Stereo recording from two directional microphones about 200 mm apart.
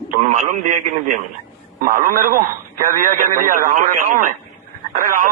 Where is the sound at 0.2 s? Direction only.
40° right (ahead or behind).